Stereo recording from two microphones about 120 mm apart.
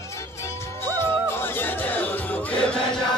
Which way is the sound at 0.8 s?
20° left (ahead or behind).